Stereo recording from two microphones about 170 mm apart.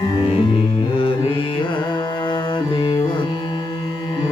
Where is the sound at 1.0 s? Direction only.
30° left (ahead or behind).